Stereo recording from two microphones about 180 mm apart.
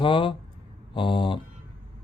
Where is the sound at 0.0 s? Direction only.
30° left (ahead or behind).